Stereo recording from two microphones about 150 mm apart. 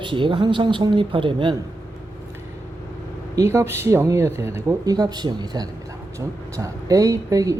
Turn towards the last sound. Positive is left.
turn(degrees=-20)  # may be behind; listen again after turning